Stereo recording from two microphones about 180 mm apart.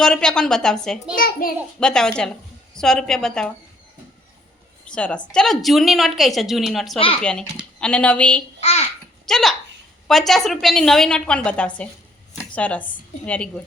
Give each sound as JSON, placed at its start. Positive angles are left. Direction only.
{"t": 0.0, "sound": "a woman's voice", "side_deg": 5}
{"t": 1.1, "sound": "a child's voice", "side_deg": 55}
{"t": 1.8, "sound": "a woman's voice", "side_deg": 5}
{"t": 4.9, "sound": "a woman's voice", "side_deg": 5}
{"t": 8.6, "sound": "a child's voice", "side_deg": 35}
{"t": 9.2, "sound": "a woman's voice", "side_deg": 0}